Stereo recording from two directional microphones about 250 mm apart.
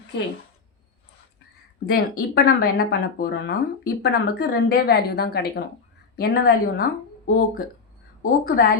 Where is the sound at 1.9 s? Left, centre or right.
Left.